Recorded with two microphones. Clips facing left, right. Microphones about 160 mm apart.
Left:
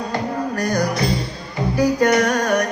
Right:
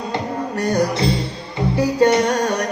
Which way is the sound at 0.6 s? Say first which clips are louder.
Right 3 dB; 25° right (ahead or behind).